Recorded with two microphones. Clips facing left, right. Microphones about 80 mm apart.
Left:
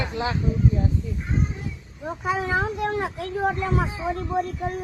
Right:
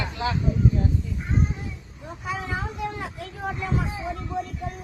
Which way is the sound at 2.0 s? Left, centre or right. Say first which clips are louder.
Left 6 dB; left.